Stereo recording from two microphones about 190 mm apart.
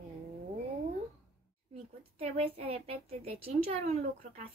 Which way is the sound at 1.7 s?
30° right (ahead or behind).